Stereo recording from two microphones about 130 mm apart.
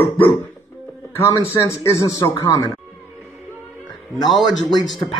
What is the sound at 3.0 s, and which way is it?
Music, 5° right (ahead or behind).